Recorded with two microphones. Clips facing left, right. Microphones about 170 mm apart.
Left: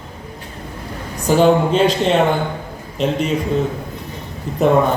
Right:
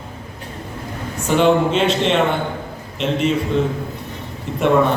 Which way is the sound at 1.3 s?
40° left (ahead or behind).